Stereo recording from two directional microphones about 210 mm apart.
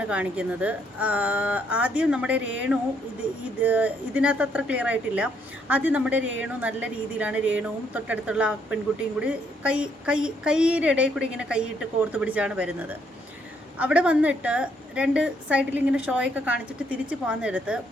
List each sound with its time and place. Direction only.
0.0 s speech: 5° right (ahead or behind)